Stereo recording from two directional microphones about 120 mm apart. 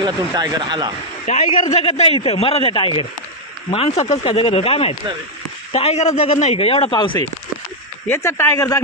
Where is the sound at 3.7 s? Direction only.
55° left (ahead or behind).